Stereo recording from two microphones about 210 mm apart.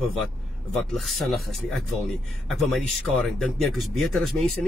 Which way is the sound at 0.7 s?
Centre (ahead or behind).